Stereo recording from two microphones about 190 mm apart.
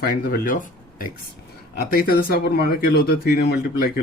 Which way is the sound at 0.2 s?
50° left (ahead or behind).